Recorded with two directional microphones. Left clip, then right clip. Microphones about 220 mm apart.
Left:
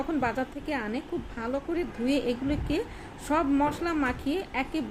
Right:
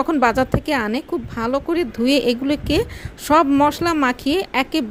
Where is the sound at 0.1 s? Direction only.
50° right (ahead or behind).